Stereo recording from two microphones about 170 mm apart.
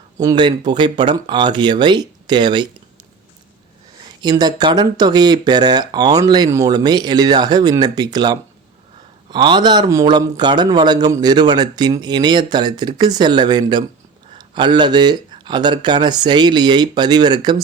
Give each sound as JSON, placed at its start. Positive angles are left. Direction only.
{"t": 0.2, "sound": "a man's voice", "side_deg": -25}
{"t": 4.0, "sound": "a man's voice", "side_deg": -25}